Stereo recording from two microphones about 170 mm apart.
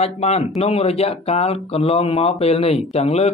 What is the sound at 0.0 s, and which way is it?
Speech, 40° left (ahead or behind).